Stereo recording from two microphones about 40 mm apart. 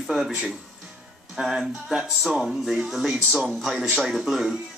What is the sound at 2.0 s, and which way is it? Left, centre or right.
Speech, centre.